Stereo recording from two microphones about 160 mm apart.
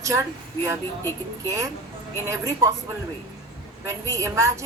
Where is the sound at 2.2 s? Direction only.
20° right (ahead or behind).